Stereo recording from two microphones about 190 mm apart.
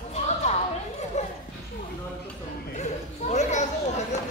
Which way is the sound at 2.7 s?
35° left (ahead or behind).